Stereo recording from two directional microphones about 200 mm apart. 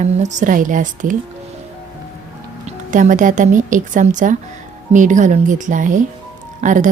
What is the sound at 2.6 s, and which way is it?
A woman's voice, 40° right (ahead or behind).